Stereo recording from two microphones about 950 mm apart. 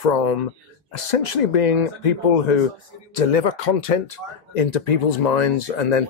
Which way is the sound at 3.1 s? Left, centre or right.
Left.